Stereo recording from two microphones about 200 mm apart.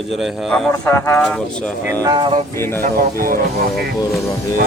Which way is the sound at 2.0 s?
20° right (ahead or behind).